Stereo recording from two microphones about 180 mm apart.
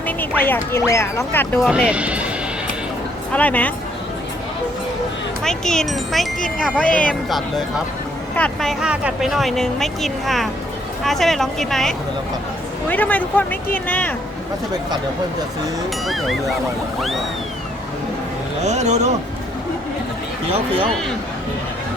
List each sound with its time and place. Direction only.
0.2 s speech: 10° left (ahead or behind)
1.6 s speech: 5° right (ahead or behind)
3.3 s speech: 10° left (ahead or behind)
5.4 s speech: 5° left (ahead or behind)
8.8 s speech: 5° right (ahead or behind)
16.0 s speech: centre (ahead or behind)
18.6 s speech: 40° right (ahead or behind)
20.5 s speech: 30° right (ahead or behind)